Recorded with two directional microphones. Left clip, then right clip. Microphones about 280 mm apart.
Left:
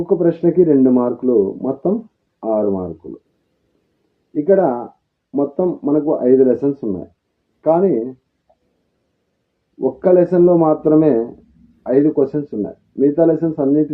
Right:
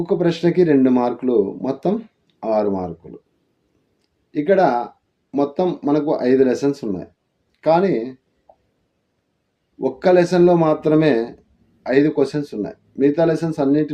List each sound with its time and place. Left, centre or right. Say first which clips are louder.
0.0 s speech: left 3 dB; right
4.4 s speech: left 1 dB; centre
10.0 s speech: left 2 dB; centre
12.1 s speech: left 2 dB; right